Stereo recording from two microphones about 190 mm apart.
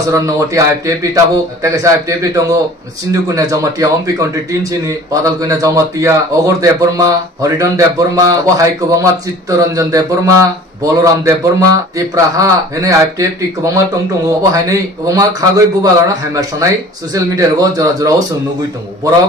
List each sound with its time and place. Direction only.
0.1 s a man's voice: 15° right (ahead or behind)
14.5 s a man's voice: 15° right (ahead or behind)